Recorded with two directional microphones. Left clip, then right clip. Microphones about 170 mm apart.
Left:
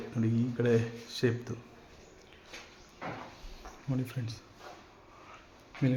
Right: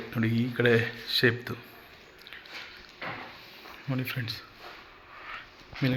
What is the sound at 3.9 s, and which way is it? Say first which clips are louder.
Speech: right 5 dB; 5° left (ahead or behind).